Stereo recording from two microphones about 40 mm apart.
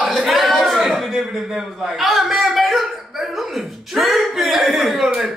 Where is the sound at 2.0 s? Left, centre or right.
Centre.